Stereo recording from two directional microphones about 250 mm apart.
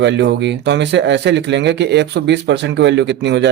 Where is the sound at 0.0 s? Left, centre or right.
Right.